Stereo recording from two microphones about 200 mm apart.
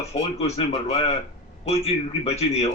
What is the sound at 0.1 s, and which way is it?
A man's voice, 30° left (ahead or behind).